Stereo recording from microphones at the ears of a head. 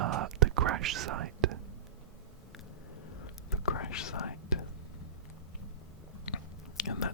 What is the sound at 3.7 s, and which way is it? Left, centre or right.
Whispering, left.